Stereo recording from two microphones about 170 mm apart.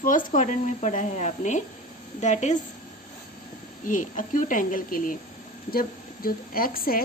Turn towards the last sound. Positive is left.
turn(degrees=60)  # may be behind; listen again after turning